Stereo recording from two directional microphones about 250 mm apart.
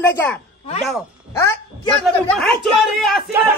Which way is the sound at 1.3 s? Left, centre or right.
Centre.